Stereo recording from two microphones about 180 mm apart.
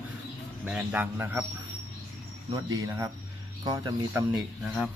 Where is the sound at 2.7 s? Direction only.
20° right (ahead or behind).